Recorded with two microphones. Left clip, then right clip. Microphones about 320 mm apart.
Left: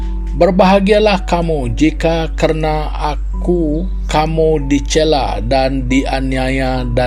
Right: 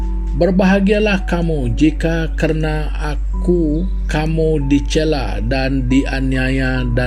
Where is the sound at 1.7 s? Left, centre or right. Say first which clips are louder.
Left 1 dB; left.